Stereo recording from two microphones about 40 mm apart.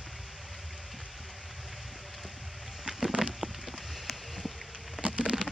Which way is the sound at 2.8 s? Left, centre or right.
Centre.